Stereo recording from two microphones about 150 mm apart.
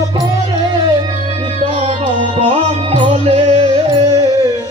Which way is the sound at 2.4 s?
40° right (ahead or behind).